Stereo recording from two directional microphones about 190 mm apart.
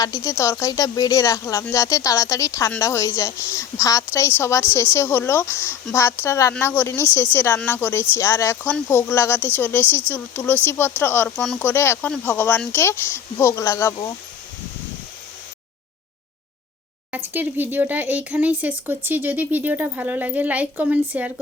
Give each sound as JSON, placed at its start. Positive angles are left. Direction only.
{"t": 0.0, "sound": "speech", "side_deg": 15}
{"t": 17.1, "sound": "speech", "side_deg": -10}